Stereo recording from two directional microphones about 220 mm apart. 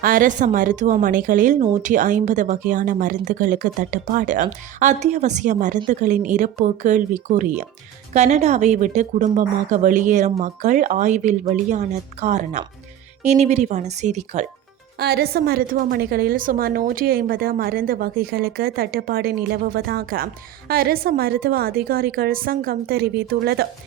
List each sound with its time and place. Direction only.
0.0 s speech: 40° right (ahead or behind)
14.9 s a woman's voice: 45° right (ahead or behind)